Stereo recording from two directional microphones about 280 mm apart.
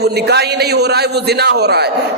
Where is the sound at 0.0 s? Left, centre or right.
Right.